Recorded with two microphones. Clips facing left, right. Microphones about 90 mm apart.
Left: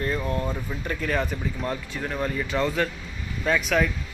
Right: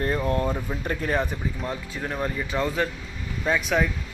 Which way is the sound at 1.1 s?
20° right (ahead or behind).